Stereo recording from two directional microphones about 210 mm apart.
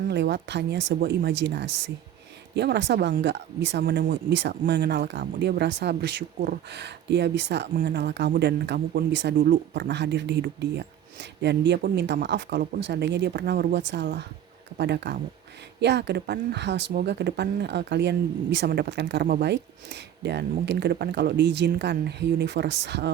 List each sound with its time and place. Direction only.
0.1 s speech: 55° right (ahead or behind)